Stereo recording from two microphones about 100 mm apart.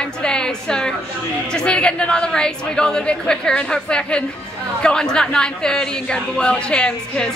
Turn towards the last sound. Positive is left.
turn(degrees=10)  # may be behind; listen again after turning